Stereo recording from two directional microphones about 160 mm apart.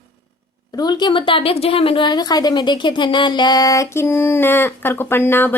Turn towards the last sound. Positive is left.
turn(degrees=15)  # may be behind; listen again after turning